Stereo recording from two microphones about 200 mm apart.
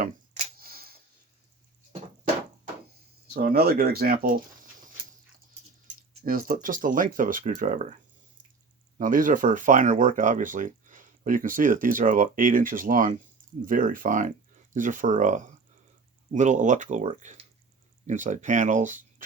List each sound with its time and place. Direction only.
0.0 s a sound: 45° right (ahead or behind)
3.3 s speech: 50° right (ahead or behind)
6.2 s speech: 45° right (ahead or behind)
9.0 s speech: 40° right (ahead or behind)